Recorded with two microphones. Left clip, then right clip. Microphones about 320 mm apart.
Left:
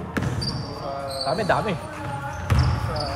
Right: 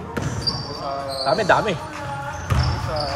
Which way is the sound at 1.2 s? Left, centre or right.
Right.